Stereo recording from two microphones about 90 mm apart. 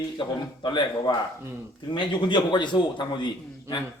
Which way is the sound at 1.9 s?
65° left (ahead or behind).